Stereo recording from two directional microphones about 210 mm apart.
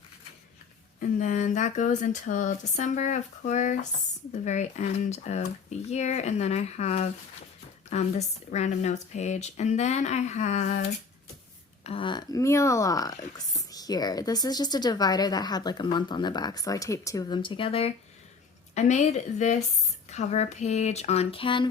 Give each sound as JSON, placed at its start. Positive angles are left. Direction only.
{"t": 0.9, "sound": "speech", "side_deg": 35}
{"t": 11.8, "sound": "a woman's voice", "side_deg": 25}